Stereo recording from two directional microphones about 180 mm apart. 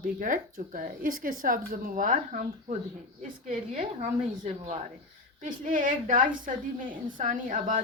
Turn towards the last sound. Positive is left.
turn(degrees=-45)  # may be behind; listen again after turning